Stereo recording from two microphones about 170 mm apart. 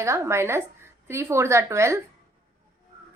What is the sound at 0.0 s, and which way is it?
A woman's voice, 15° right (ahead or behind).